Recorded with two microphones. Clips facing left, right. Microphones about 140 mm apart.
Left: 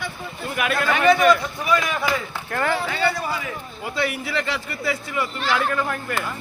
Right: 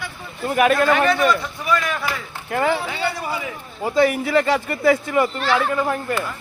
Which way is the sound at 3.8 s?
45° right (ahead or behind).